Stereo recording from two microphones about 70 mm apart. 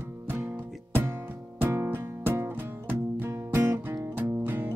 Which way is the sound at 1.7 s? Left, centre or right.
Right.